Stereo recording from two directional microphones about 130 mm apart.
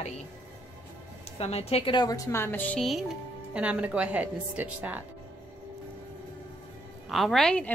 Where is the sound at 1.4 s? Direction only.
50° left (ahead or behind).